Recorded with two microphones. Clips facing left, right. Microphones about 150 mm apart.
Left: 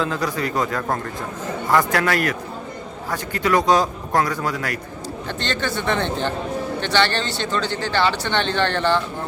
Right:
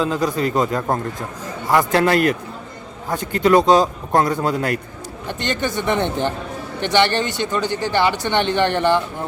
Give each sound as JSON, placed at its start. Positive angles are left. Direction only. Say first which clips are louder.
{"t": 0.0, "sound": "speech", "louder": "right 4 dB", "side_deg": -20}
{"t": 5.3, "sound": "speech", "louder": "right 3 dB", "side_deg": -15}